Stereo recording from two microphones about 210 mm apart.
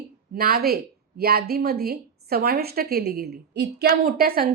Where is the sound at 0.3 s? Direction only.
45° right (ahead or behind).